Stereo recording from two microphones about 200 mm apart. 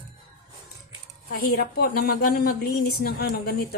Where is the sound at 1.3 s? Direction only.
50° left (ahead or behind).